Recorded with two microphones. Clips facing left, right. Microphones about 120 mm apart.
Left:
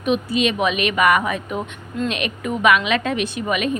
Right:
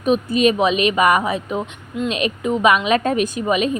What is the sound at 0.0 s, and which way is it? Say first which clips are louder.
Speech: right 4 dB; 40° right (ahead or behind).